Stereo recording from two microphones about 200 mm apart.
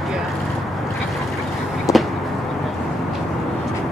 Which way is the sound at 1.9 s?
15° left (ahead or behind).